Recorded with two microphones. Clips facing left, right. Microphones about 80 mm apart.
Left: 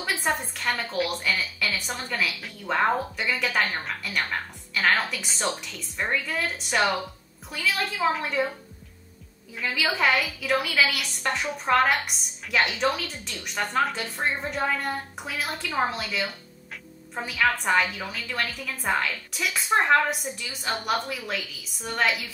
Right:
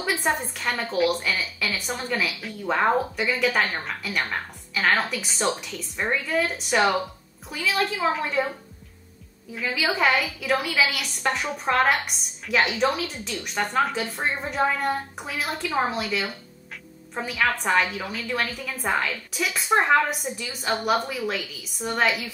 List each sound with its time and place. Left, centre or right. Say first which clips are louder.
0.0 s a woman's voice: right 2 dB; centre
9.6 s a woman's voice: right 2 dB; centre